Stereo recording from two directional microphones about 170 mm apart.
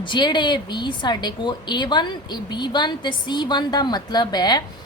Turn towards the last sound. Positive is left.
turn(degrees=25)  # may be behind; listen again after turning